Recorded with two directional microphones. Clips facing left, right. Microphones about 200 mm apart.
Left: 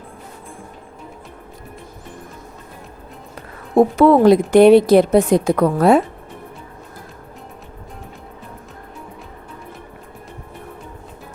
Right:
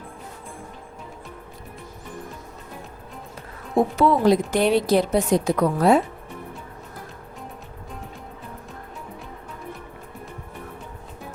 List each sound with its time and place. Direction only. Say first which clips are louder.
3.8 s a woman's voice: left 7 dB; 55° left (ahead or behind)